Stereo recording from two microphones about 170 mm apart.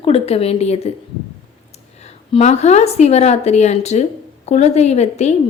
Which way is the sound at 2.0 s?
40° left (ahead or behind).